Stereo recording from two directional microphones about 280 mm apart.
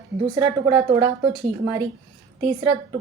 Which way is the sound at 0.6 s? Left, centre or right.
Centre.